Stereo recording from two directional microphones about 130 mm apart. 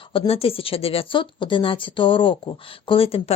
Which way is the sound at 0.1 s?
45° left (ahead or behind).